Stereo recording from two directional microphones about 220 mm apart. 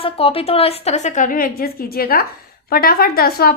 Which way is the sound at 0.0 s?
25° left (ahead or behind).